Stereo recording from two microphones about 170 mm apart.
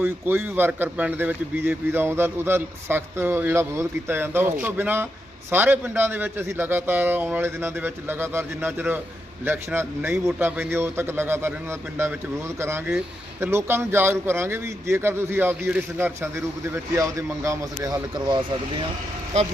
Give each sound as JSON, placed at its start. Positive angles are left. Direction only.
{"t": 0.0, "sound": "speech", "side_deg": -15}